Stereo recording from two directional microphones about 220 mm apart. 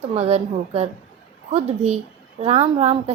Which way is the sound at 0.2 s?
30° right (ahead or behind).